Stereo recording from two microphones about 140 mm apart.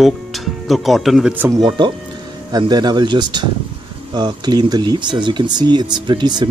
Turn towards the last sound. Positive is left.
turn(degrees=-30)  # may be behind; listen again after turning